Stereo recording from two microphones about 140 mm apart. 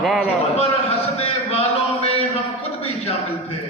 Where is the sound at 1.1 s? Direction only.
45° left (ahead or behind).